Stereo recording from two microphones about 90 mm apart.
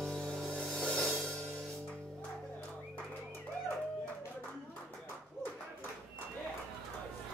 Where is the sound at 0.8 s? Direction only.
5° left (ahead or behind).